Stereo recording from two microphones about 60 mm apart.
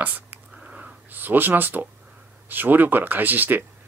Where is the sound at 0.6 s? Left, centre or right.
Right.